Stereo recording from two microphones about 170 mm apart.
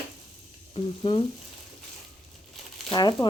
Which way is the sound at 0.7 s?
30° left (ahead or behind).